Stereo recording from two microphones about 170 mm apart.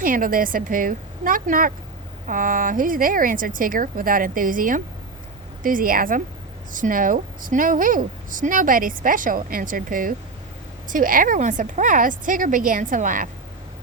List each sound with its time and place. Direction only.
0.0 s a woman's voice: 55° right (ahead or behind)